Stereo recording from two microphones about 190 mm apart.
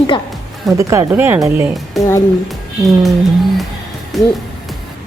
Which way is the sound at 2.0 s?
15° left (ahead or behind).